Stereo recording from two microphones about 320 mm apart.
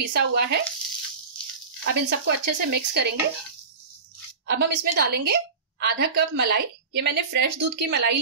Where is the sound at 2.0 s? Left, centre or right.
Right.